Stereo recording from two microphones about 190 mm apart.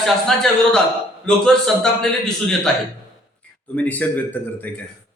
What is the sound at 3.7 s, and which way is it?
Speech, 10° left (ahead or behind).